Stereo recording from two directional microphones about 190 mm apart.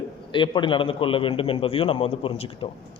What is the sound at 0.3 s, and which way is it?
A man's voice, 25° left (ahead or behind).